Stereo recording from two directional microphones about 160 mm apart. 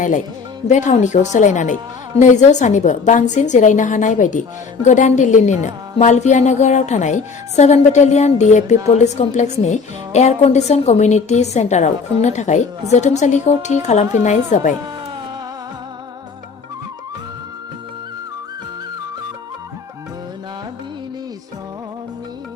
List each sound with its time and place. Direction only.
0.7 s a woman's voice: 50° left (ahead or behind)